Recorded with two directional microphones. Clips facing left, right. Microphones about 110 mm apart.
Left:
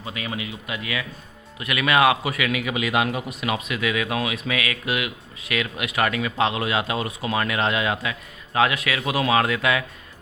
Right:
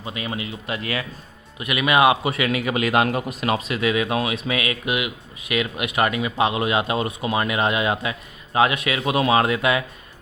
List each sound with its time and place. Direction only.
0.0 s speech: 30° right (ahead or behind)
1.5 s a man's voice: 20° right (ahead or behind)